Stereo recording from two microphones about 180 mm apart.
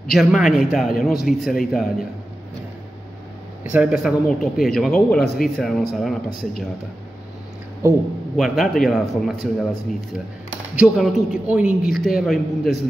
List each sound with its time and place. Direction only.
0.1 s a man's voice: centre (ahead or behind)
3.6 s a man's voice: 5° right (ahead or behind)
8.4 s a man's voice: centre (ahead or behind)